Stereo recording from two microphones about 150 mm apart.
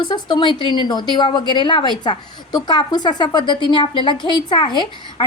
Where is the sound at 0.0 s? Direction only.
30° left (ahead or behind).